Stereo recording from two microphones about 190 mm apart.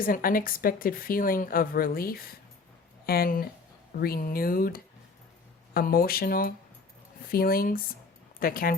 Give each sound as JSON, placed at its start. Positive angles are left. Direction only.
{"t": 0.0, "sound": "speech", "side_deg": 50}